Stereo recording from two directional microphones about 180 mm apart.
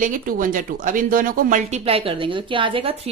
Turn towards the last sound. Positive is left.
turn(degrees=-30)  # may be behind; listen again after turning